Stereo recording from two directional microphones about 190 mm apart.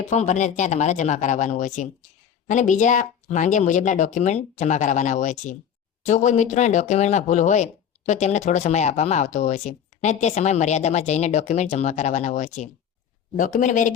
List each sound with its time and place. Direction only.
0.0 s a man's voice: 40° left (ahead or behind)